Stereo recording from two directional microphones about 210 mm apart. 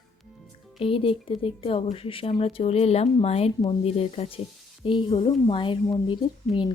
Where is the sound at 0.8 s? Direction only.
25° left (ahead or behind).